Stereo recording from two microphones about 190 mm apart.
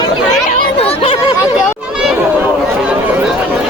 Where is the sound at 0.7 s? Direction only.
30° left (ahead or behind).